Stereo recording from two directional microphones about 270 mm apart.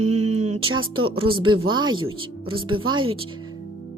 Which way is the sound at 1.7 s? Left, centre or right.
Centre.